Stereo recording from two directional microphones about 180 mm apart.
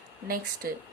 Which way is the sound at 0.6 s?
55° right (ahead or behind).